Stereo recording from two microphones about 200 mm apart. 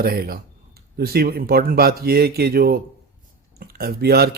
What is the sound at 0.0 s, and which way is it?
Speech, 50° right (ahead or behind).